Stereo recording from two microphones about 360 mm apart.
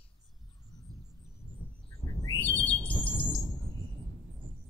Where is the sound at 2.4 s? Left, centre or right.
Centre.